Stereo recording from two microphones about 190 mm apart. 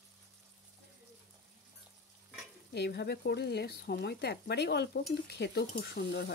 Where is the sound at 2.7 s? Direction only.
60° left (ahead or behind).